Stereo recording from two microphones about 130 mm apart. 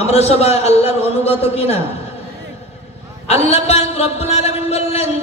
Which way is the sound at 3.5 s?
55° left (ahead or behind).